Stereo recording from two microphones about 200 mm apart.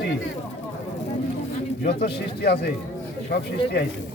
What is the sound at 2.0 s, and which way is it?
Speech, 50° left (ahead or behind).